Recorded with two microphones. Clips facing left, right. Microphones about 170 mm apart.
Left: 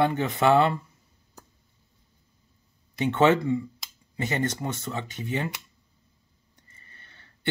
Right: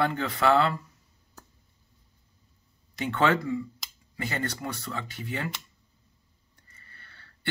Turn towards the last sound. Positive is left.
turn(degrees=20)  # may be behind; listen again after turning